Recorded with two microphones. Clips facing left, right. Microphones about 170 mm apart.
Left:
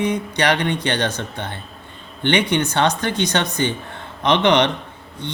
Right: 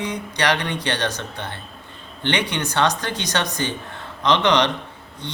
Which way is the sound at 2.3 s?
25° left (ahead or behind).